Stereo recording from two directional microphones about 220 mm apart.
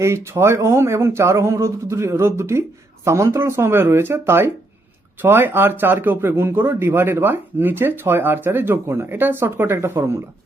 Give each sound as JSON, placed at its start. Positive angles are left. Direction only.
{"t": 0.0, "sound": "speech", "side_deg": -10}